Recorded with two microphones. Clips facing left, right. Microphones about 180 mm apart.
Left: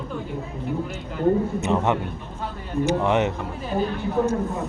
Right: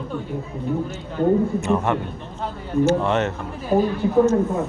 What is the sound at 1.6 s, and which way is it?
A man's voice, 20° left (ahead or behind).